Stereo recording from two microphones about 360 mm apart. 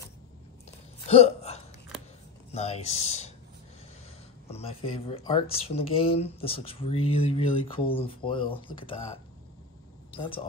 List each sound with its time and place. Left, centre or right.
1.0 s hiccup: centre
2.5 s speech: centre
4.5 s speech: centre
10.1 s speech: centre